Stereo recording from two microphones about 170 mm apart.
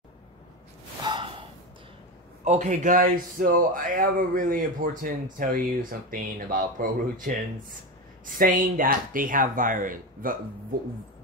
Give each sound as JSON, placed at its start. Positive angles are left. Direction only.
{"t": 1.0, "sound": "gasp", "side_deg": -30}
{"t": 2.4, "sound": "speech", "side_deg": -45}